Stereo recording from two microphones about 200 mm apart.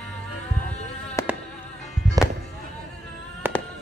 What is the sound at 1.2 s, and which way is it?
Music, 15° left (ahead or behind).